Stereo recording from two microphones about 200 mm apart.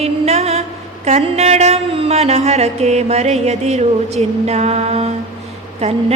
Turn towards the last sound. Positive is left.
turn(degrees=-30)  # may be behind; listen again after turning